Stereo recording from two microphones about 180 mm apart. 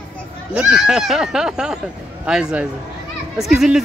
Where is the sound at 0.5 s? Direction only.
5° right (ahead or behind).